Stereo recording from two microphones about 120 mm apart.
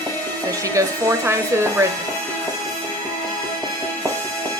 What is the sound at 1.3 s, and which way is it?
Speech, 20° right (ahead or behind).